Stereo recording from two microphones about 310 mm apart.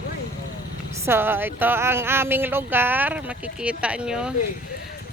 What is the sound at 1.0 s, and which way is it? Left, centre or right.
Speech, centre.